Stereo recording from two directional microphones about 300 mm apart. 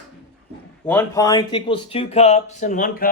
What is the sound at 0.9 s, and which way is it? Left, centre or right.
Speech, centre.